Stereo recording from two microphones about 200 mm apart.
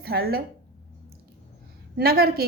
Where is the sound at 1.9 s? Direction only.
50° right (ahead or behind).